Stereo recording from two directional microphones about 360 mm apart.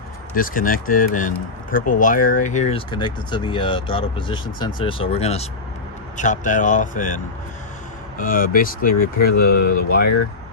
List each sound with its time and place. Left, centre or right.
0.3 s speech: left
8.2 s speech: left